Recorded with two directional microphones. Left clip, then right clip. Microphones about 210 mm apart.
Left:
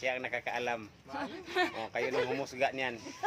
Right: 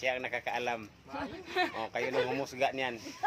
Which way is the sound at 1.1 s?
25° left (ahead or behind).